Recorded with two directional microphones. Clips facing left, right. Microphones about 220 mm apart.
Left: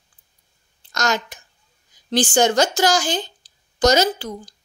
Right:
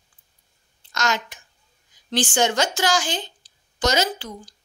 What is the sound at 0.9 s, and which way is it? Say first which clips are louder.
A woman's voice: left 3 dB; 40° left (ahead or behind).